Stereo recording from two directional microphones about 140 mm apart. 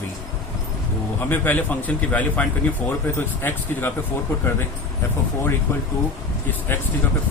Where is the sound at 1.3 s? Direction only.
10° left (ahead or behind).